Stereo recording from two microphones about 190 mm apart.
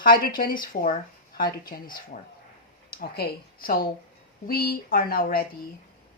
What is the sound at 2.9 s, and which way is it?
Speech, 55° left (ahead or behind).